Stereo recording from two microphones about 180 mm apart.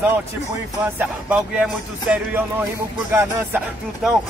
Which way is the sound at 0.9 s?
5° right (ahead or behind).